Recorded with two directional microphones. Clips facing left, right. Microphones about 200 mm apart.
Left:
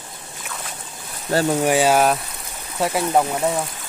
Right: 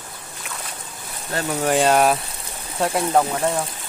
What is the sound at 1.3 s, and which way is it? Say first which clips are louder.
Speech: left 6 dB; 35° left (ahead or behind).